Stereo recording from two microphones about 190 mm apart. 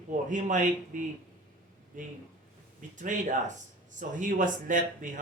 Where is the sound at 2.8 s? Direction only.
40° right (ahead or behind).